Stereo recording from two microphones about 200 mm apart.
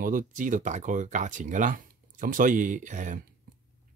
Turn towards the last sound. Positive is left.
turn(degrees=-40)  # may be behind; listen again after turning